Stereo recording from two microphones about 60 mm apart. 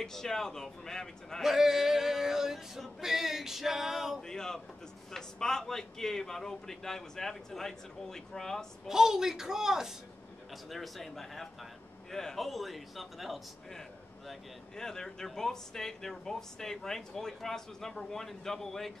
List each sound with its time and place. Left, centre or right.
0.0 s speech: centre
1.4 s male singing: centre
4.2 s speech: centre
8.8 s a woman's voice: centre
10.7 s male singing: centre
14.8 s speech: centre